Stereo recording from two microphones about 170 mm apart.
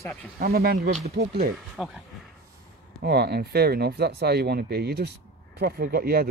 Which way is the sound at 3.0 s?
70° right (ahead or behind).